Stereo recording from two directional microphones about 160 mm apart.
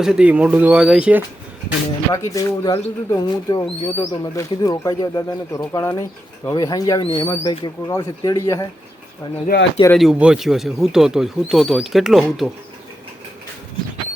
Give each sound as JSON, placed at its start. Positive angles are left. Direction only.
{"t": 0.0, "sound": "speech", "side_deg": -5}
{"t": 2.1, "sound": "speech", "side_deg": 20}
{"t": 9.5, "sound": "speech", "side_deg": 90}
{"t": 9.9, "sound": "speech", "side_deg": 0}